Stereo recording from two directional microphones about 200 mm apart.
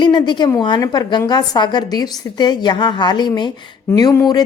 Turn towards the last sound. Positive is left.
turn(degrees=15)  # may be behind; listen again after turning